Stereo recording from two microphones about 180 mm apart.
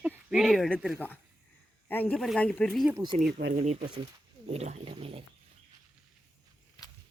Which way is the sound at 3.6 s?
40° right (ahead or behind).